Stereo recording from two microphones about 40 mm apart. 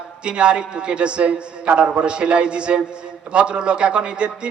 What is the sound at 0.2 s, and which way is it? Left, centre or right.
A man's voice, right.